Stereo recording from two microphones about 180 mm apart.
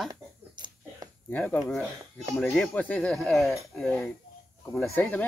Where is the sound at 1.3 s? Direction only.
5° left (ahead or behind).